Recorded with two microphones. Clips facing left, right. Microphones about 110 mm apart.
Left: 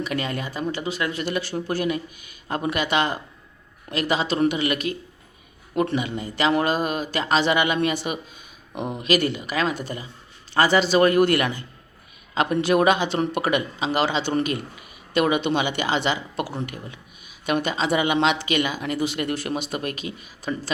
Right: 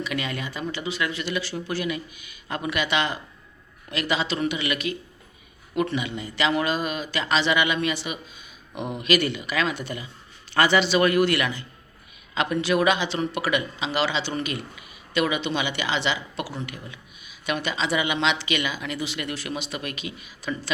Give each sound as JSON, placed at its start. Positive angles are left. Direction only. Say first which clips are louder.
{"t": 0.0, "sound": "speech", "louder": "left 2 dB", "side_deg": 40}